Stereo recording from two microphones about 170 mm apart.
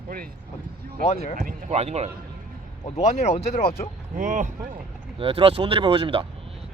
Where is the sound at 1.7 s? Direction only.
40° right (ahead or behind).